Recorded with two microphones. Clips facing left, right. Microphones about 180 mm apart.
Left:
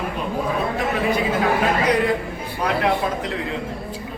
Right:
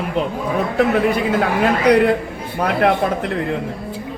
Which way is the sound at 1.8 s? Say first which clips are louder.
Right 6 dB; 70° right (ahead or behind).